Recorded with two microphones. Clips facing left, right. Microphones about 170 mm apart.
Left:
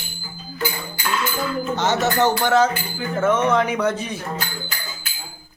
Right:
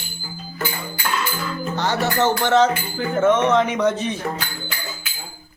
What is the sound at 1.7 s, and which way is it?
Music, 20° left (ahead or behind).